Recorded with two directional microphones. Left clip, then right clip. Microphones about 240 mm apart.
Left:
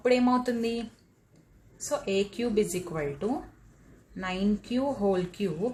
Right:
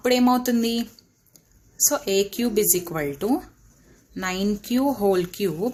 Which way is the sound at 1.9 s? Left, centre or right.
Right.